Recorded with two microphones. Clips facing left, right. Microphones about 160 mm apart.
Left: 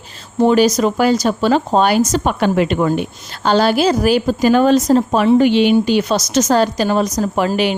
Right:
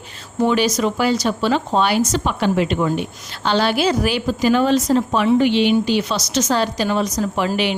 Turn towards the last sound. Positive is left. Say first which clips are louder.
# left 4 dB
turn(degrees=45)  # may be behind; listen again after turning